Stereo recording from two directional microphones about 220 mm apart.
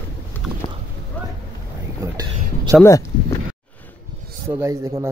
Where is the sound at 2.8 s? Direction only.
15° left (ahead or behind).